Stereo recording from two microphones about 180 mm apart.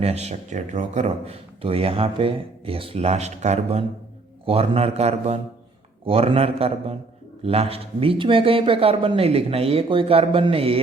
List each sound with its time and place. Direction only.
0.0 s speech: 35° right (ahead or behind)